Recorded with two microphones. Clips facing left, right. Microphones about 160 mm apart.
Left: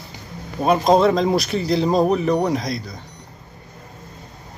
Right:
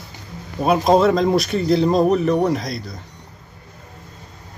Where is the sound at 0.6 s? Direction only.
5° right (ahead or behind).